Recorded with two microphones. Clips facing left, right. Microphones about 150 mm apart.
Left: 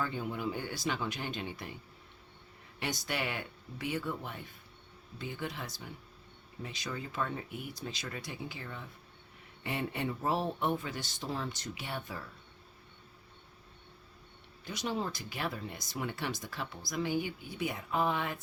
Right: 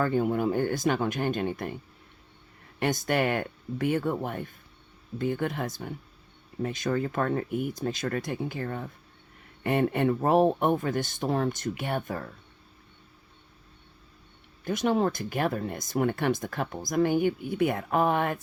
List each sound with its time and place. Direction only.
0.0 s speech: 50° right (ahead or behind)
14.6 s speech: 50° right (ahead or behind)